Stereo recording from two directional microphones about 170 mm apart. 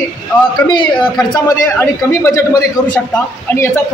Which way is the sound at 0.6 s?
25° left (ahead or behind).